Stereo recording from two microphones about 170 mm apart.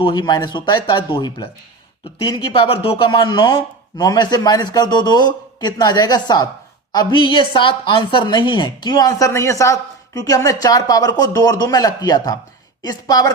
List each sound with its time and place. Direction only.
0.0 s a woman's voice: 25° left (ahead or behind)